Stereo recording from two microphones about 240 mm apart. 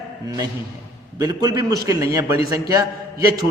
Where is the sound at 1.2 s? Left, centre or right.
Centre.